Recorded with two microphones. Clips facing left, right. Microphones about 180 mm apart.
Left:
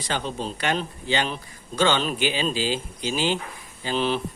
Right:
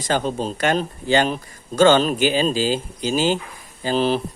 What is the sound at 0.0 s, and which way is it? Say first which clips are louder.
Speech: right 6 dB; 45° right (ahead or behind).